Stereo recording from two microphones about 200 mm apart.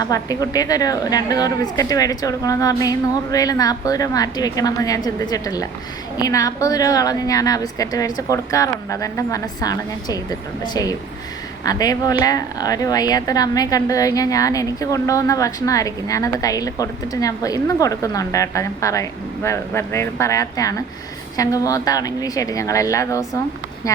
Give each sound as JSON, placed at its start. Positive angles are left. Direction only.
{"t": 0.0, "sound": "a woman's voice", "side_deg": 20}